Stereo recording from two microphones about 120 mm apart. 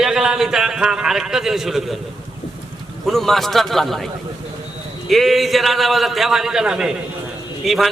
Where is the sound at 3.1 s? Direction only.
Centre (ahead or behind).